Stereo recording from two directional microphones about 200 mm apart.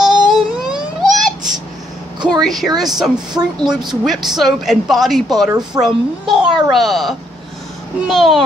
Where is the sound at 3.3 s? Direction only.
20° right (ahead or behind).